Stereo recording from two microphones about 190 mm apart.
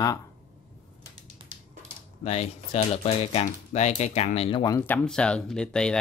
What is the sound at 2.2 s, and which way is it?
Speech, 35° left (ahead or behind).